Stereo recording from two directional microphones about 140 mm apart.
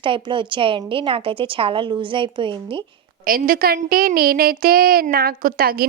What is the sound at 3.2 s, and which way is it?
Speech, 90° right.